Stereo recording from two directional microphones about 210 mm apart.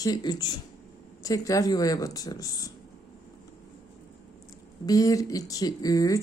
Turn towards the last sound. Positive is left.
turn(degrees=15)  # may be behind; listen again after turning